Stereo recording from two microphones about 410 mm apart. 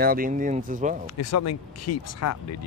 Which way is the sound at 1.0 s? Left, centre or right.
Left.